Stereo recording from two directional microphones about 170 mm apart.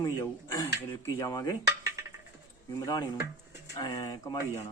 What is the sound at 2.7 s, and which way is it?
Speech, 25° left (ahead or behind).